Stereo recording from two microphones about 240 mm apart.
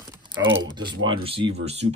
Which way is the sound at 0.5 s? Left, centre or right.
Centre.